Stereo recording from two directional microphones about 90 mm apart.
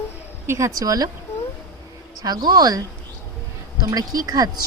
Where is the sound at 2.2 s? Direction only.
45° right (ahead or behind).